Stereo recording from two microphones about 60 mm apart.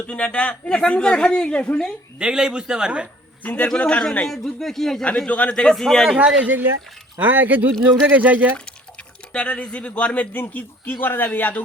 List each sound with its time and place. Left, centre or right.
0.1 s a woman's voice: centre
2.1 s a man's voice: centre
3.4 s a man's voice: left
4.3 s speech: centre
5.0 s a woman's voice: left
6.1 s speech: right
8.5 s speech: centre